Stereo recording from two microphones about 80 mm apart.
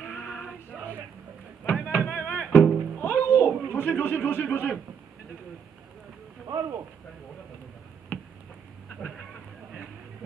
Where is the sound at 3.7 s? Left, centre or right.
Left.